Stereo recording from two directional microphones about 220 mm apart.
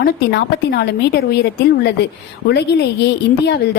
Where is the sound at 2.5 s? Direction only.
50° left (ahead or behind).